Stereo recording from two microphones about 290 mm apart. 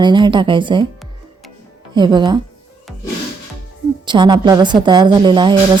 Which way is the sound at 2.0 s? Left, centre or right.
Centre.